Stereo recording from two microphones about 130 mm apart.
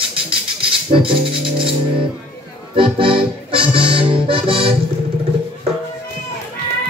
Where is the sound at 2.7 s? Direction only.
40° right (ahead or behind).